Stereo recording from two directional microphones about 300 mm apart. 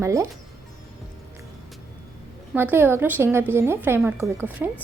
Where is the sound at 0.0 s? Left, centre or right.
Centre.